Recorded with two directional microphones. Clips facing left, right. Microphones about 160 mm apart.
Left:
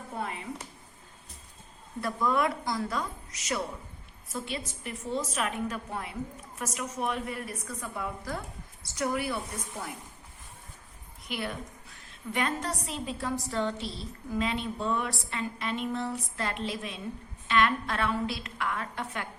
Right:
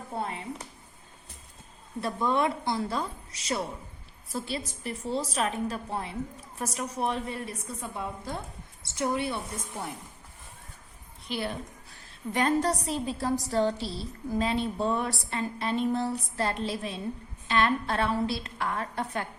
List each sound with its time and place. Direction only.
2.0 s a woman's voice: 25° right (ahead or behind)
11.3 s a woman's voice: 30° right (ahead or behind)